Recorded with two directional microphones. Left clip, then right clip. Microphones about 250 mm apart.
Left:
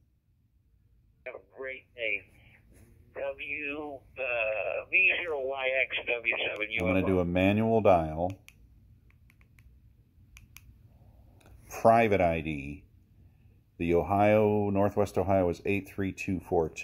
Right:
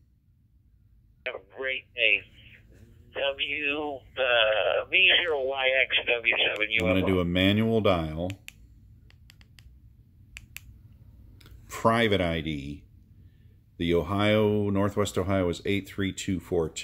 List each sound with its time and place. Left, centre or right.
1.2 s a sound: centre
3.1 s speech: centre
6.9 s speech: centre
9.0 s a sound: centre
11.3 s speech: centre
13.7 s speech: centre